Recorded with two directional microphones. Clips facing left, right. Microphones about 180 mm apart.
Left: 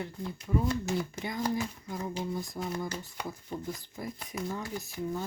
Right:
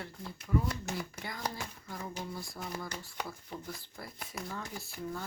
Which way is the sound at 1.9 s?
20° left (ahead or behind).